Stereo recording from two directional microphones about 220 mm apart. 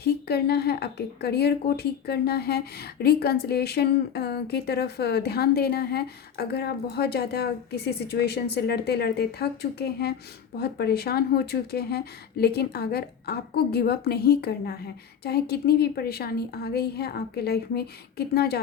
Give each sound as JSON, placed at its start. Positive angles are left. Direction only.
{"t": 0.0, "sound": "speech", "side_deg": 45}